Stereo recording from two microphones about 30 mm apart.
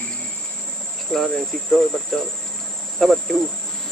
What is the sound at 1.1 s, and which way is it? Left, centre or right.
Speech, centre.